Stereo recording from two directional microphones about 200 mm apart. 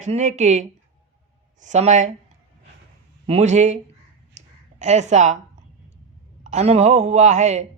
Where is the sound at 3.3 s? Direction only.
35° right (ahead or behind).